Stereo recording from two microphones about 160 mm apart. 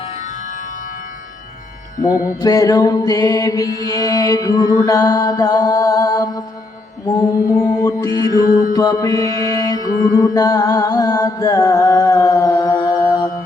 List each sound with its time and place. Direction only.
2.3 s music: 20° left (ahead or behind)
9.5 s mantra: 25° left (ahead or behind)
10.0 s music: 25° left (ahead or behind)